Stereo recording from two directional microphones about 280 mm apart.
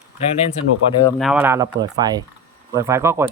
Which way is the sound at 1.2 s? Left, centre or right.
Centre.